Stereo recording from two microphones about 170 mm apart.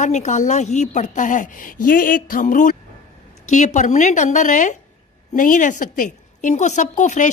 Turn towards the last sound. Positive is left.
turn(degrees=45)  # may be behind; listen again after turning